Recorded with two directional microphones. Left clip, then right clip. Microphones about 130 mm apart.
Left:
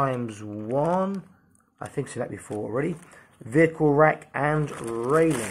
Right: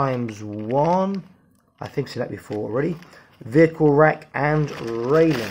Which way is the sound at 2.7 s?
15° right (ahead or behind).